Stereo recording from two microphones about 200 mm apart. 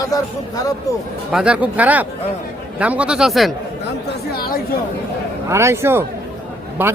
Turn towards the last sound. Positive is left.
turn(degrees=-10)  # may be behind; listen again after turning